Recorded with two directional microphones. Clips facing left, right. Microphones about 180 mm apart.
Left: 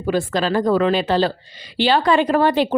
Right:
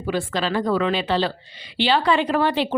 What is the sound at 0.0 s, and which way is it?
Speech, 45° left (ahead or behind).